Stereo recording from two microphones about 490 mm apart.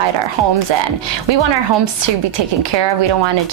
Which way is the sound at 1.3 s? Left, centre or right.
Right.